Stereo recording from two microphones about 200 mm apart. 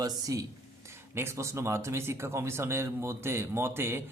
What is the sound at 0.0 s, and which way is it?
Speech, 20° right (ahead or behind).